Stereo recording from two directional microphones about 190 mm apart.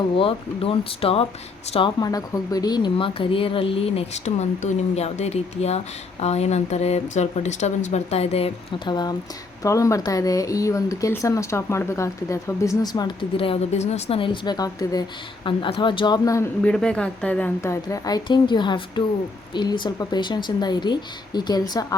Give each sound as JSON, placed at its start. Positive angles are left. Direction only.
{"t": 0.2, "sound": "speech", "side_deg": 30}
{"t": 16.6, "sound": "speech", "side_deg": 5}